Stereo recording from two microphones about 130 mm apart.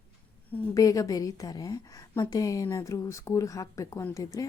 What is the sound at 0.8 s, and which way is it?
A woman's voice, 25° left (ahead or behind).